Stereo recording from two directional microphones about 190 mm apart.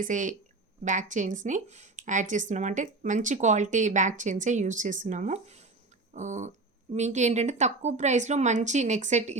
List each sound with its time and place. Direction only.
0.0 s speech: 40° right (ahead or behind)